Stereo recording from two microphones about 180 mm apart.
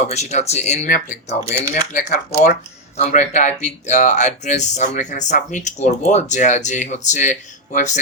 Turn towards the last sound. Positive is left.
turn(degrees=40)  # may be behind; listen again after turning